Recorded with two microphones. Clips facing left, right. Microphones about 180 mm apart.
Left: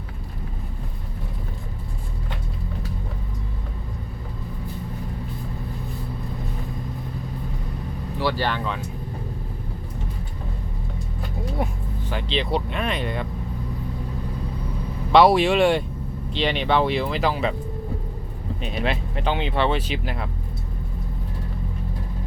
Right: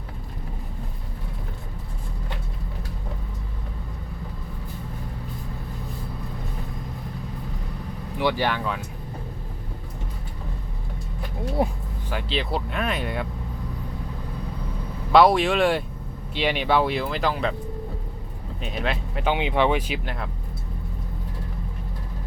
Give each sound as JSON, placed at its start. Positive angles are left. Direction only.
{"t": 8.2, "sound": "speech", "side_deg": -15}
{"t": 11.6, "sound": "speech", "side_deg": -30}
{"t": 12.1, "sound": "speech", "side_deg": -5}
{"t": 15.1, "sound": "speech", "side_deg": 0}
{"t": 18.6, "sound": "speech", "side_deg": 0}
{"t": 19.2, "sound": "speech", "side_deg": -15}